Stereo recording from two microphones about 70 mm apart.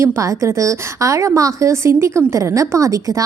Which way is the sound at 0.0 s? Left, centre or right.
Right.